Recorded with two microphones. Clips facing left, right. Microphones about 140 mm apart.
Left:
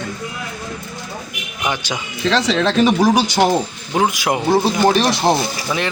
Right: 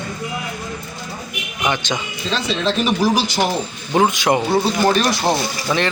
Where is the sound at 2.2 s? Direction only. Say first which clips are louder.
Left 5 dB; 75° left (ahead or behind).